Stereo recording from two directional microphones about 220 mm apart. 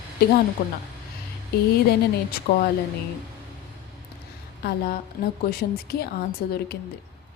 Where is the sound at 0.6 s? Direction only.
40° left (ahead or behind).